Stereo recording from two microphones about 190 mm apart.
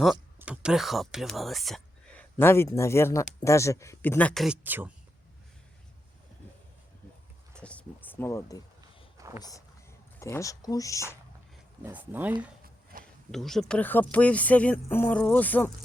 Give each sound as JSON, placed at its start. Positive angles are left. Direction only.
{"t": 0.3, "sound": "speech", "side_deg": -5}
{"t": 2.4, "sound": "speech", "side_deg": 15}
{"t": 7.5, "sound": "a sound", "side_deg": 5}
{"t": 9.4, "sound": "speech", "side_deg": 20}
{"t": 11.8, "sound": "speech", "side_deg": -10}
{"t": 12.6, "sound": "a sound", "side_deg": -50}
{"t": 13.3, "sound": "speech", "side_deg": 0}